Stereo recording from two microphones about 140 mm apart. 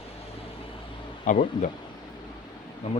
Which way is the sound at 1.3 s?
65° left (ahead or behind).